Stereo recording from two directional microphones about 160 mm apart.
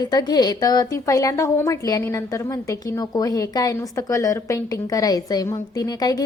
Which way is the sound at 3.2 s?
20° left (ahead or behind).